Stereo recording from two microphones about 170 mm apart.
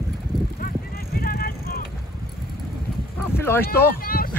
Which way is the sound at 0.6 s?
60° left (ahead or behind).